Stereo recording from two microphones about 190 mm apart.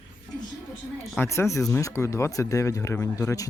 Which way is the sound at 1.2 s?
15° left (ahead or behind).